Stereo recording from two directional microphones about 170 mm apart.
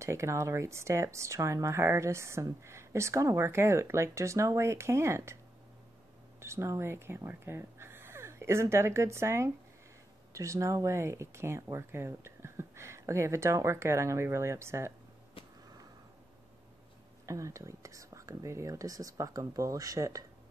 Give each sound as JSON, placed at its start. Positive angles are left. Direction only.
{"t": 0.0, "sound": "speech", "side_deg": -15}
{"t": 6.4, "sound": "speech", "side_deg": -15}
{"t": 15.4, "sound": "sniff", "side_deg": 30}
{"t": 17.3, "sound": "speech", "side_deg": -20}